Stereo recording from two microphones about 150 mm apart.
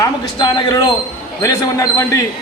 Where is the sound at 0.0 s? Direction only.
30° left (ahead or behind).